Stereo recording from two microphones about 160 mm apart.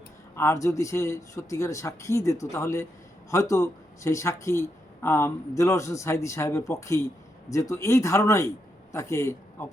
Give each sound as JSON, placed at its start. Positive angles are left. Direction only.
{"t": 0.3, "sound": "speech", "side_deg": 20}